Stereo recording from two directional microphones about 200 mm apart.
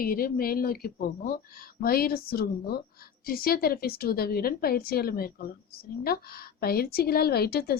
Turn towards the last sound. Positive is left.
turn(degrees=50)  # may be behind; listen again after turning